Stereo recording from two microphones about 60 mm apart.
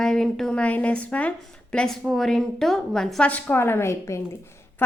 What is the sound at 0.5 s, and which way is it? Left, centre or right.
A woman's voice, left.